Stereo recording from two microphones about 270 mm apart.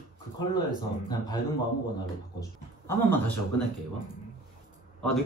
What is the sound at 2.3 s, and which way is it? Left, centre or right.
Speech, centre.